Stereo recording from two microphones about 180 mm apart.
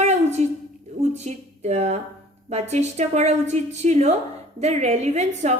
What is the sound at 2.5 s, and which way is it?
A woman's voice, 40° right (ahead or behind).